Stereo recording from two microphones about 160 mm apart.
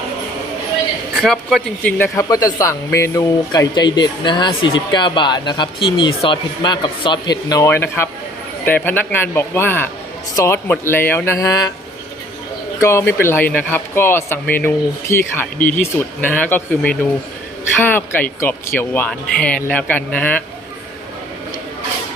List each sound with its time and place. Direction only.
1.1 s a man's voice: centre (ahead or behind)
2.0 s speech: 20° left (ahead or behind)
12.8 s speech: 15° left (ahead or behind)